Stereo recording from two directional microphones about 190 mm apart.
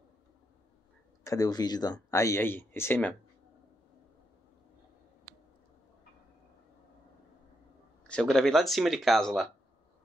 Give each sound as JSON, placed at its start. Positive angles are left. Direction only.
{"t": 1.2, "sound": "speech", "side_deg": 20}
{"t": 8.1, "sound": "speech", "side_deg": 5}